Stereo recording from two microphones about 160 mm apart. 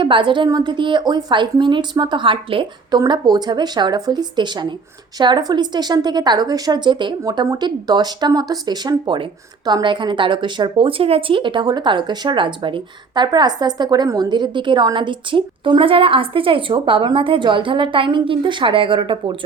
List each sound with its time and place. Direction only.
0.0 s a woman's voice: 30° right (ahead or behind)